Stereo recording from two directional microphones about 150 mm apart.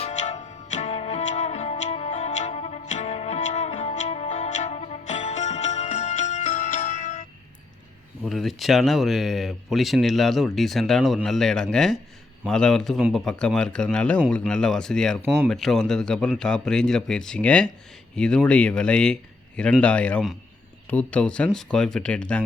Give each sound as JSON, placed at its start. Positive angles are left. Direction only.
{"t": 0.0, "sound": "music", "side_deg": 50}
{"t": 8.2, "sound": "speech", "side_deg": 0}